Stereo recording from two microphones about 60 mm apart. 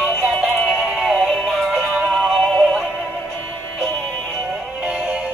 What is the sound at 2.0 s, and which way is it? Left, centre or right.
Music, centre.